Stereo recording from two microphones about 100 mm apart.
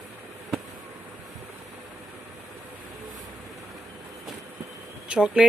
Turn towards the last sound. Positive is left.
turn(degrees=-10)  # may be behind; listen again after turning